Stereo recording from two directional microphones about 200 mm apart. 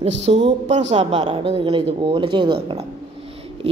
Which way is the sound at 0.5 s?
35° right (ahead or behind).